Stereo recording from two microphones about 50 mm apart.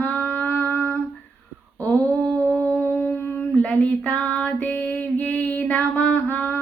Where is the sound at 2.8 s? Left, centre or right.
Left.